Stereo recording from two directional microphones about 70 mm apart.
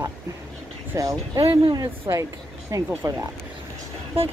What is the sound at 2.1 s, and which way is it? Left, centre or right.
Speech, right.